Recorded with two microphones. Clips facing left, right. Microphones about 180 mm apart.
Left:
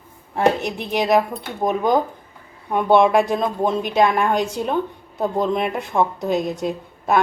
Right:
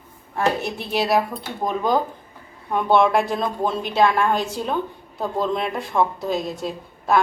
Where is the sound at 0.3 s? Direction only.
20° left (ahead or behind).